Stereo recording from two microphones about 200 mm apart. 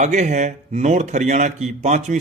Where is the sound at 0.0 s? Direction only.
35° right (ahead or behind).